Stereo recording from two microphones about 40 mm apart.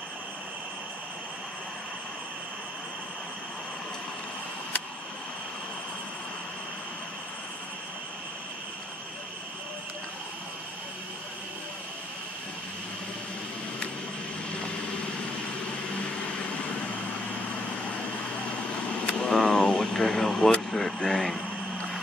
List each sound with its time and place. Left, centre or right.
15.9 s vehicle: left
19.2 s vehicle: centre
20.7 s a sound: centre